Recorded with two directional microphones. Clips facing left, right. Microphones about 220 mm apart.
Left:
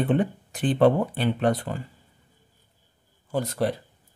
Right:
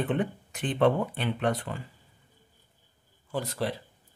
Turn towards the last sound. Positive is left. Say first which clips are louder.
# left 5 dB
turn(degrees=45)  # may be behind; listen again after turning